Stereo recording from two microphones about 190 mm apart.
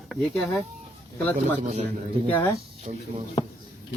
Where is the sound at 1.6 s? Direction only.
40° right (ahead or behind).